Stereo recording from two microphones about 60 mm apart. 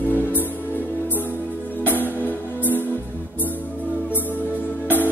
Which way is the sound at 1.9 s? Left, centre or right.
Left.